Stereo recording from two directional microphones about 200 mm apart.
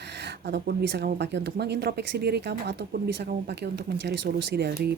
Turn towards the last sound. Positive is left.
turn(degrees=-55)  # may be behind; listen again after turning